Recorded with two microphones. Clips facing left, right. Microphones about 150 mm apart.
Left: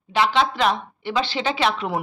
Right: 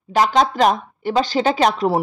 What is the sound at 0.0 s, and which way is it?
Speech, 40° right (ahead or behind).